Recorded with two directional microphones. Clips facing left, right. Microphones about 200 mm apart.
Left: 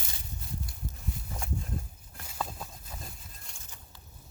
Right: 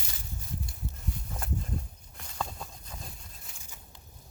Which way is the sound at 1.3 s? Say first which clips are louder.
Right 1 dB; centre (ahead or behind).